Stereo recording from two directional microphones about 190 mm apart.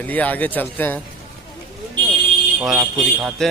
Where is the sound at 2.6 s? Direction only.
Centre (ahead or behind).